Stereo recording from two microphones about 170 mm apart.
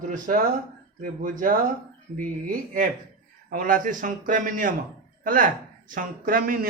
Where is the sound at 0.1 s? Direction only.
50° right (ahead or behind).